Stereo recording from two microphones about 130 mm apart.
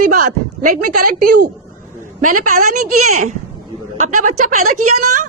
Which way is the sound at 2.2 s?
90° right.